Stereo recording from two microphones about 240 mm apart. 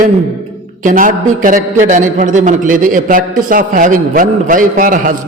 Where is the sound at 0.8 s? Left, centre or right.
Right.